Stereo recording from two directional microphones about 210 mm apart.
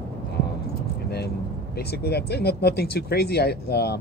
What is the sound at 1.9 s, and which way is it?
Speech, 50° left (ahead or behind).